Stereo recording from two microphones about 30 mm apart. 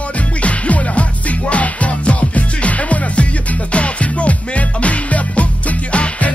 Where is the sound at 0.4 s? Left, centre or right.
Left.